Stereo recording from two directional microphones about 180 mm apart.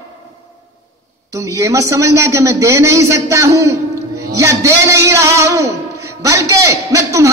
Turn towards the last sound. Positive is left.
turn(degrees=-15)  # may be behind; listen again after turning